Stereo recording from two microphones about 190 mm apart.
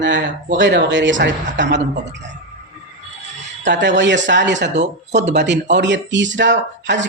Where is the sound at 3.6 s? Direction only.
70° right (ahead or behind).